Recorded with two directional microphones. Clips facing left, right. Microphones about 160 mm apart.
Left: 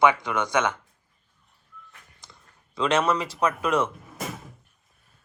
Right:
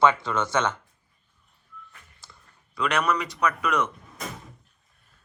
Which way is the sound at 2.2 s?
20° left (ahead or behind).